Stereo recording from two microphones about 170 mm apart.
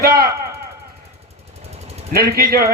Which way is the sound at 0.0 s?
60° right (ahead or behind).